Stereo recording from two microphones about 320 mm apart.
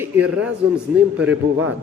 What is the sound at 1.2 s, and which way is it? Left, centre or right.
Speech, right.